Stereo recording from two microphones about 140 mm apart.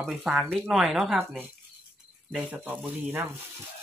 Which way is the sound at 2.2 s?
10° right (ahead or behind).